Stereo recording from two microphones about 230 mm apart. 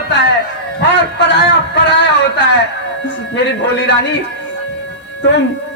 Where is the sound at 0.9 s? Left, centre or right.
Left.